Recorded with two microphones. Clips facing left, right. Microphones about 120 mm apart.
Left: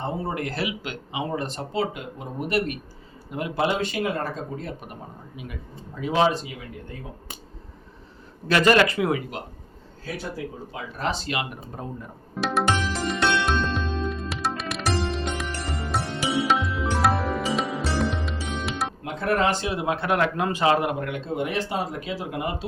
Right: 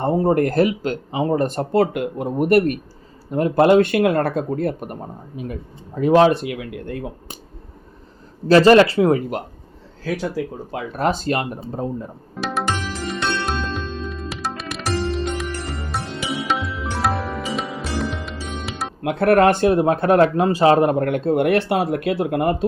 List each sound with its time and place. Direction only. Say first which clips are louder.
0.0 s speech: right 11 dB; 55° right (ahead or behind)
5.4 s speech: right 9 dB; 40° right (ahead or behind); by 7.0 s 70° right (ahead or behind)
8.4 s speech: right 8 dB; 30° right (ahead or behind)
10.7 s speech: right 7 dB; 55° right (ahead or behind); by 11.9 s 35° right (ahead or behind)
12.4 s music: even; centre (ahead or behind)
19.0 s speech: right 10 dB; 65° right (ahead or behind)